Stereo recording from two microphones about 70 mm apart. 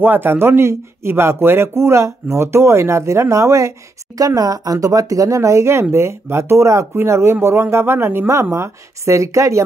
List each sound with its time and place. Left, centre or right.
0.0 s speech: right
4.4 s speech: right